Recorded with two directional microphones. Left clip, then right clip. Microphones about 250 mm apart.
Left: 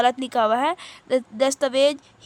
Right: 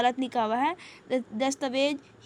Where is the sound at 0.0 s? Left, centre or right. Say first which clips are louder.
Left 6 dB; centre.